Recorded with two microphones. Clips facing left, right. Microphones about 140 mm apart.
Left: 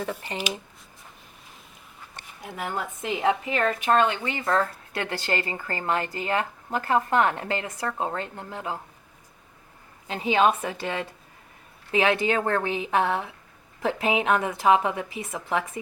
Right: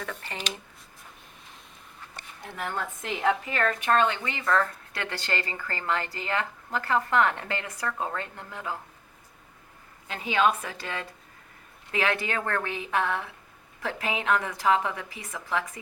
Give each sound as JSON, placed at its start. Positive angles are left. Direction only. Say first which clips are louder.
{"t": 0.1, "sound": "a woman's voice", "louder": "left 5 dB", "side_deg": 15}
{"t": 2.4, "sound": "a woman's voice", "louder": "left 2 dB", "side_deg": 10}
{"t": 10.1, "sound": "speech", "louder": "left 3 dB", "side_deg": 20}